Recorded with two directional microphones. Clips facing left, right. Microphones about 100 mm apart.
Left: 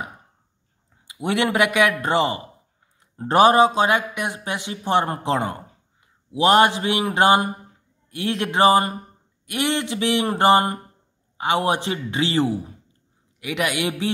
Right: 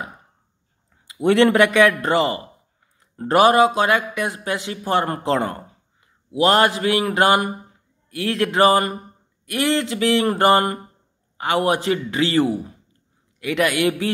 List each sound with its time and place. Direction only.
1.2 s a man's voice: 10° left (ahead or behind)